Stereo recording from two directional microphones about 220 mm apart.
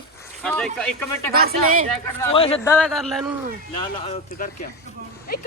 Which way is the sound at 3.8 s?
25° left (ahead or behind).